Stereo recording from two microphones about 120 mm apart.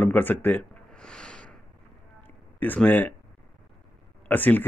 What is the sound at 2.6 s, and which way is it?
Speech, 15° left (ahead or behind).